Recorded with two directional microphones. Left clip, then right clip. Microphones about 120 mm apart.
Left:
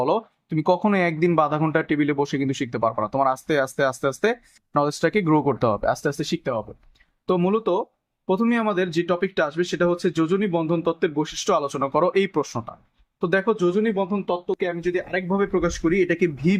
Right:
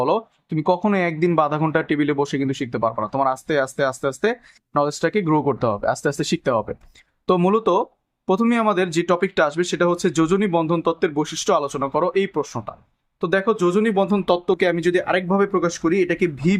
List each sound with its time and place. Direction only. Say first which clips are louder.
0.0 s speech: right 2 dB; 10° right (ahead or behind)
13.1 s speech: right 2 dB; 15° right (ahead or behind)
13.7 s speech: right 3 dB; 45° right (ahead or behind)
15.3 s speech: right 3 dB; 25° right (ahead or behind)